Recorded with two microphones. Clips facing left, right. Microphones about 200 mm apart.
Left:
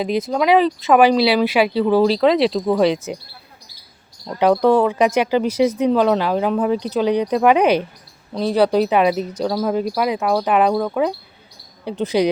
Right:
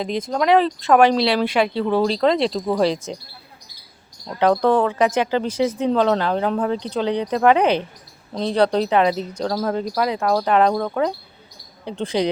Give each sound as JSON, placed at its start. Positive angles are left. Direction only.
{"t": 0.0, "sound": "speech", "side_deg": 5}
{"t": 4.4, "sound": "speech", "side_deg": 10}